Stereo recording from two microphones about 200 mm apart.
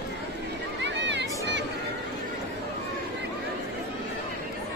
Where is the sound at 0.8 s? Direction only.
60° right (ahead or behind).